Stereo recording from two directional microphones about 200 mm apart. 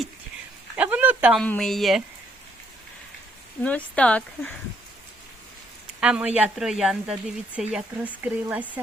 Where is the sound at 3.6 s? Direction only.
5° left (ahead or behind).